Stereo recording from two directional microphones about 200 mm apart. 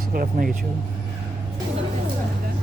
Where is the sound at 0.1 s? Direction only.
45° right (ahead or behind).